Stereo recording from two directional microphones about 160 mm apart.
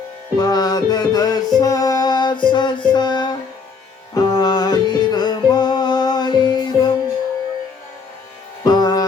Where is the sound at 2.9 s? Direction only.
30° left (ahead or behind).